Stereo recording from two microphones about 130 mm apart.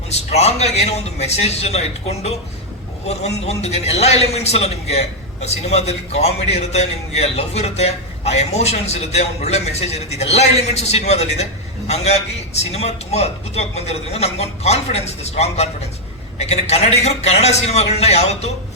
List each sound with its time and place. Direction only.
0.1 s a man's voice: 55° left (ahead or behind)